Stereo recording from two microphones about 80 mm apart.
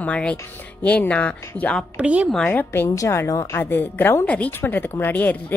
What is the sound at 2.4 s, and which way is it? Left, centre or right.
Speech, left.